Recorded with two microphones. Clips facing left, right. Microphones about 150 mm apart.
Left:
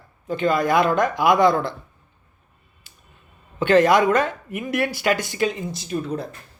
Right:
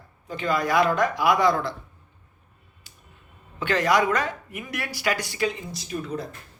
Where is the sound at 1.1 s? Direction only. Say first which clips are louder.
Left 4 dB; 25° left (ahead or behind).